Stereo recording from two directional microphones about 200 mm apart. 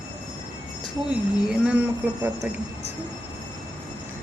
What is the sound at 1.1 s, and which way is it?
Speech, 5° right (ahead or behind).